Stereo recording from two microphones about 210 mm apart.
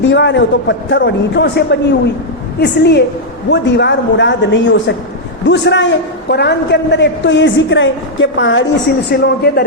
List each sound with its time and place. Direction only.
0.0 s a man's voice: 60° left (ahead or behind)